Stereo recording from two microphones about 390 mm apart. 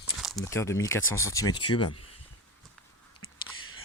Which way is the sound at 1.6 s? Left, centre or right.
Left.